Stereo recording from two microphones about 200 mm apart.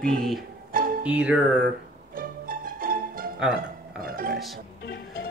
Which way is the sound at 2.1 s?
45° right (ahead or behind).